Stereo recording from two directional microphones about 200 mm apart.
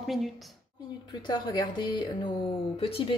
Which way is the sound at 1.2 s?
20° left (ahead or behind).